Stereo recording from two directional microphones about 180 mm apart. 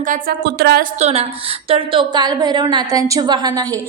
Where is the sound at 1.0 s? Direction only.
35° right (ahead or behind).